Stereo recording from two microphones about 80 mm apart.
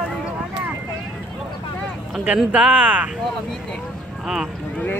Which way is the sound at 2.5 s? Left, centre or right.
Centre.